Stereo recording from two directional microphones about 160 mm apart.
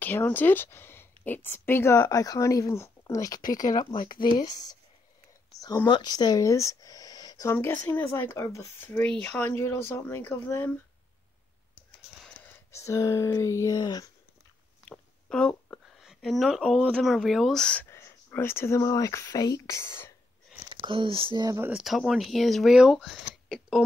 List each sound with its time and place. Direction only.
0.0 s speech: 10° left (ahead or behind)
5.9 s speech: 30° left (ahead or behind)
7.5 s speech: 10° left (ahead or behind)
12.2 s a sound: 5° left (ahead or behind)
12.7 s speech: 20° left (ahead or behind)
14.9 s speech: 5° left (ahead or behind)
17.8 s speech: 15° left (ahead or behind)
20.7 s speech: 30° right (ahead or behind)
21.6 s speech: 5° right (ahead or behind)